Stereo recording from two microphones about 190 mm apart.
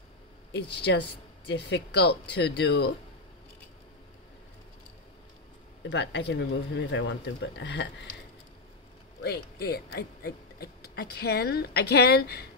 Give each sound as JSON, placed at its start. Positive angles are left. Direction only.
{"t": 0.5, "sound": "speech", "side_deg": 60}
{"t": 5.9, "sound": "speech", "side_deg": 65}
{"t": 9.2, "sound": "speech", "side_deg": 55}